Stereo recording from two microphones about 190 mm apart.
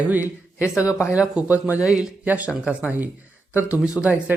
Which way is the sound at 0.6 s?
15° left (ahead or behind).